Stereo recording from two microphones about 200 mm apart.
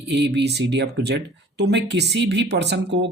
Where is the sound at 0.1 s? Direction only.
60° right (ahead or behind).